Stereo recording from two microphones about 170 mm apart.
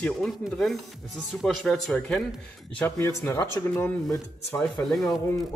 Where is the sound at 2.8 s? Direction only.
15° left (ahead or behind).